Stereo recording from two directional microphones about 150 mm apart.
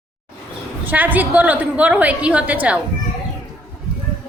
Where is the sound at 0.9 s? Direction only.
10° right (ahead or behind).